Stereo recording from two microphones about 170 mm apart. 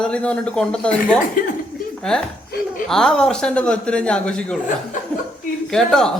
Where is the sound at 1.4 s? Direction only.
55° left (ahead or behind).